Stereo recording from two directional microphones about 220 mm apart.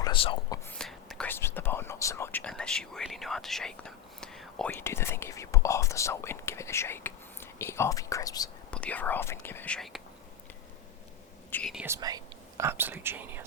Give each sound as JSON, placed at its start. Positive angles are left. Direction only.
{"t": 0.0, "sound": "whispering", "side_deg": 25}
{"t": 0.7, "sound": "speech", "side_deg": 0}
{"t": 11.5, "sound": "speech", "side_deg": 0}
{"t": 11.9, "sound": "speech", "side_deg": -15}